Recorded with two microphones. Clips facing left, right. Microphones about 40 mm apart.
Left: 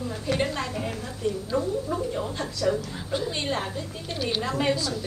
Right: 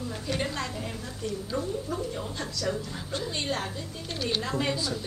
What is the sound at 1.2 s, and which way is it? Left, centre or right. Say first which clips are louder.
A woman's voice: left 5 dB; centre.